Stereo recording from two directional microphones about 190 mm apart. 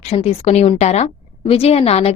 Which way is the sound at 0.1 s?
35° left (ahead or behind).